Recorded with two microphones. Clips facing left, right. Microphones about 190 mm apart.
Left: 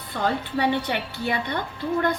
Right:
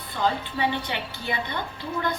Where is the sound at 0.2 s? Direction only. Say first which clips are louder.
Left 1 dB; 60° left (ahead or behind).